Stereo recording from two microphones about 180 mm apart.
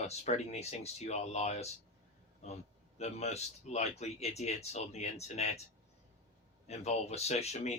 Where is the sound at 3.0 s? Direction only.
35° left (ahead or behind).